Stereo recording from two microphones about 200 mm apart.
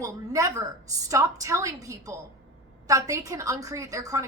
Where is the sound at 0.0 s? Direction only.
15° right (ahead or behind).